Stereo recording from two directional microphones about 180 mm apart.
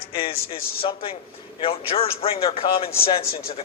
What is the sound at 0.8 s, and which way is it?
A man's voice, 30° left (ahead or behind).